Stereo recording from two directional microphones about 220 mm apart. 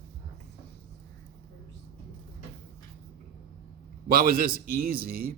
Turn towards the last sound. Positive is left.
turn(degrees=-45)  # may be behind; listen again after turning